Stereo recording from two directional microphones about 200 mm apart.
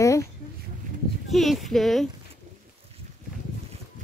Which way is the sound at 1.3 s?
Centre (ahead or behind).